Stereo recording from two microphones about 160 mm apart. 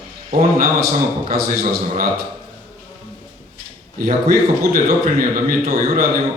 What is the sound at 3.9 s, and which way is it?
A man's voice, 65° right (ahead or behind).